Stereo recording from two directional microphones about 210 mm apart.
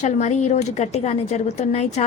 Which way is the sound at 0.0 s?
35° left (ahead or behind).